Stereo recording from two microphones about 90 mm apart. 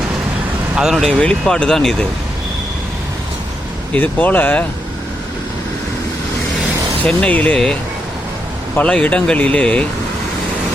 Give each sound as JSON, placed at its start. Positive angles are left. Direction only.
{"t": 0.8, "sound": "speech", "side_deg": -5}
{"t": 1.2, "sound": "speech", "side_deg": 10}
{"t": 3.9, "sound": "speech", "side_deg": 20}
{"t": 7.0, "sound": "speech", "side_deg": 15}
{"t": 7.5, "sound": "speech", "side_deg": 5}